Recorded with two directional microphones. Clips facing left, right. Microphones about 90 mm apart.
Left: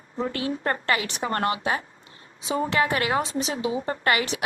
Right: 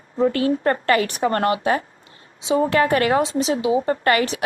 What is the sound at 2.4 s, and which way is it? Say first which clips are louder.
Speech: right 7 dB; 25° right (ahead or behind).